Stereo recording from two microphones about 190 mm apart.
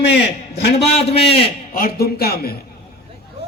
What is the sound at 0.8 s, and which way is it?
Speech, 30° left (ahead or behind).